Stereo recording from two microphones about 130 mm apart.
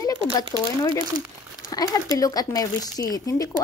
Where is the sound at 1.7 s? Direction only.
30° left (ahead or behind).